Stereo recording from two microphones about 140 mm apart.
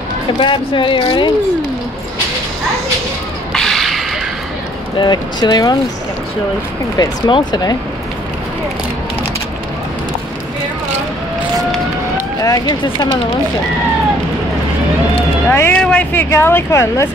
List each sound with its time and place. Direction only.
0.4 s speech: 35° left (ahead or behind)
3.5 s whip: 5° left (ahead or behind)
4.9 s speech: 30° left (ahead or behind)
7.2 s speech: 35° left (ahead or behind)
12.4 s speech: 25° left (ahead or behind)
15.5 s speech: 15° left (ahead or behind)